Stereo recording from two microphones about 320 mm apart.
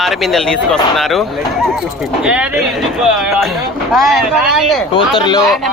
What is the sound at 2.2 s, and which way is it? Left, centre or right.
Speech, centre.